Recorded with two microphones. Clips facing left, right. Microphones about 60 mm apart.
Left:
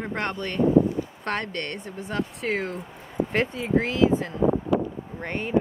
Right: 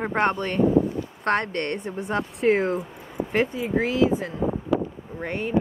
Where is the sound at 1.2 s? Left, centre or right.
Right.